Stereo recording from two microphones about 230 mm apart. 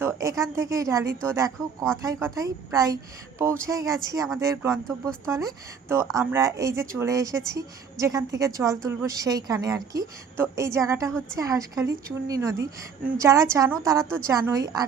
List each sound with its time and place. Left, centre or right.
0.0 s speech: centre
4.9 s speech: centre
5.3 s speech: centre
14.0 s speech: centre
14.3 s speech: centre